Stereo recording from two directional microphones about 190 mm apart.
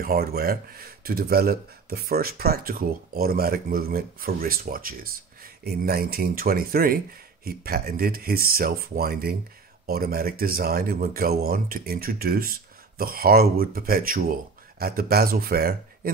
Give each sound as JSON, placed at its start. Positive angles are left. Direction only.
{"t": 0.0, "sound": "speech", "side_deg": -50}